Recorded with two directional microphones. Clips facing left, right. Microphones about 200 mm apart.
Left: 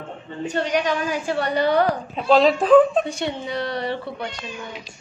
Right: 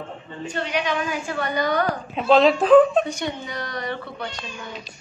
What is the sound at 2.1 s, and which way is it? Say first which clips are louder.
Speech: right 1 dB; centre (ahead or behind).